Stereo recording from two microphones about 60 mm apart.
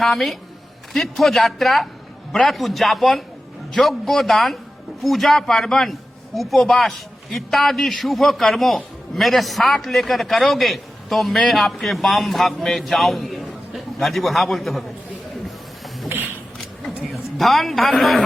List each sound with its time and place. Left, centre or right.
0.0 s a man's voice: centre
17.0 s a man's voice: centre